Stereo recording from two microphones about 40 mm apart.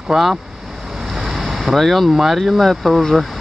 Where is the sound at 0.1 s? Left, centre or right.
Centre.